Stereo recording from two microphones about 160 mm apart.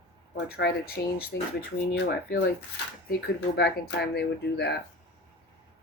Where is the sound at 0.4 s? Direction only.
80° left.